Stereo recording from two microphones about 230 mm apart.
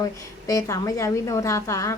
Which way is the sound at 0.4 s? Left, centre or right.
Centre.